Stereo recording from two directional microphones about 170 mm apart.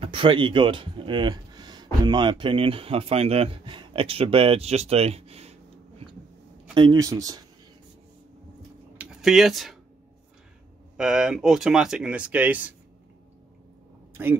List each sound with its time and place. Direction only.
0.0 s speech: 30° right (ahead or behind)
6.7 s speech: 25° right (ahead or behind)
8.9 s a sound: 5° right (ahead or behind)
11.0 s speech: 5° right (ahead or behind)